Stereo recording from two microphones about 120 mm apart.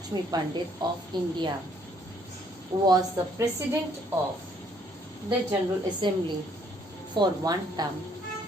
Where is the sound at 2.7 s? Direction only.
30° right (ahead or behind).